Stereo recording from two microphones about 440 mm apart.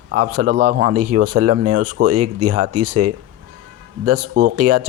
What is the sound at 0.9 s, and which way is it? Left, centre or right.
Speech, right.